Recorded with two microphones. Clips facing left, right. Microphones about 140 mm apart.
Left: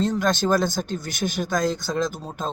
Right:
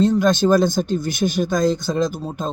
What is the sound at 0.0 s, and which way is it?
Speech, 15° right (ahead or behind).